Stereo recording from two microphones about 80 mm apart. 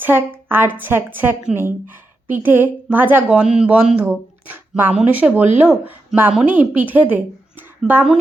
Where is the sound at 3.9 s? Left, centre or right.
Right.